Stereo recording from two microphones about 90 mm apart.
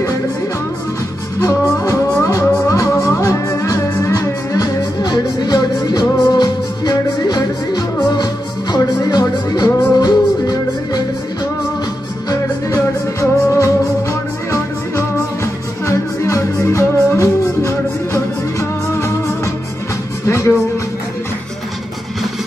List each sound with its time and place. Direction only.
1.4 s music: 40° left (ahead or behind)
12.3 s music: 40° left (ahead or behind)